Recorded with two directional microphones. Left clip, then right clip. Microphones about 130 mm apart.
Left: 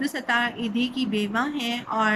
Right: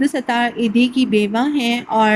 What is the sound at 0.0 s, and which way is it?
A woman's voice, 30° right (ahead or behind).